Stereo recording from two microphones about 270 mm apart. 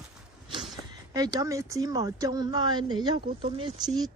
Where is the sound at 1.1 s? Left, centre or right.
Centre.